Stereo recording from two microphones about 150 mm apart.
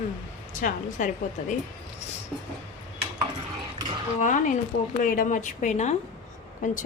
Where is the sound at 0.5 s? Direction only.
60° left (ahead or behind).